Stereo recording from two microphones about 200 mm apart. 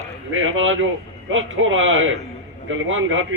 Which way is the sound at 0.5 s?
80° right.